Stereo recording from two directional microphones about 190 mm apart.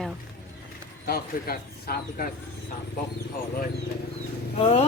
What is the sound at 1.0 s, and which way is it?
A man's voice, 55° left (ahead or behind).